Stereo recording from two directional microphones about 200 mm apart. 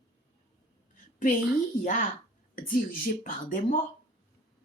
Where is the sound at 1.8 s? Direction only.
40° left (ahead or behind).